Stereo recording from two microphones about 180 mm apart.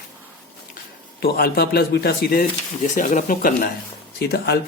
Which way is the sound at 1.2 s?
60° left (ahead or behind).